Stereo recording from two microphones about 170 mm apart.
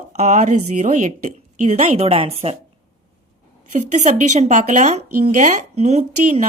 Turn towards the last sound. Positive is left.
turn(degrees=-40)  # may be behind; listen again after turning